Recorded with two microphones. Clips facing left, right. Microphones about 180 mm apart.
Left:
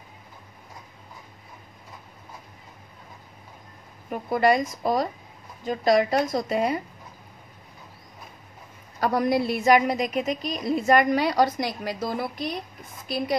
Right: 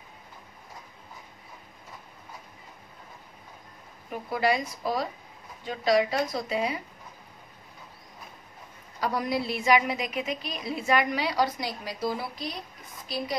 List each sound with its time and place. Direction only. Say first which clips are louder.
4.1 s a woman's voice: left 5 dB; 45° left (ahead or behind)
9.0 s a woman's voice: left 6 dB; 50° left (ahead or behind)